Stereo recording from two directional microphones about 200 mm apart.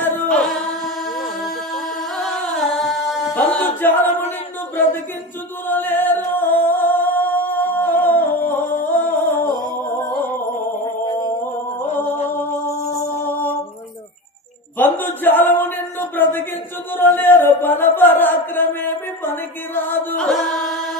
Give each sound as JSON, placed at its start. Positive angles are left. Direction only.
{"t": 0.0, "sound": "singing", "side_deg": 10}
{"t": 1.4, "sound": "music", "side_deg": 0}
{"t": 5.7, "sound": "music", "side_deg": 10}
{"t": 11.1, "sound": "a sound", "side_deg": 15}
{"t": 13.2, "sound": "music", "side_deg": 10}
{"t": 14.8, "sound": "a sound", "side_deg": 10}